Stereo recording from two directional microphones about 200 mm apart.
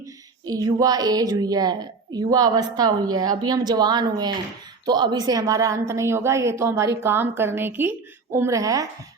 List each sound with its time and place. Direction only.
0.4 s a woman's voice: 20° right (ahead or behind)